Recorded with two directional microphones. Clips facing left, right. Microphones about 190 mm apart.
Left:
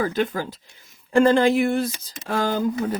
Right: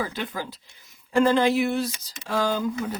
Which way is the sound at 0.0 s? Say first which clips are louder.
Left 7 dB; 45° left (ahead or behind).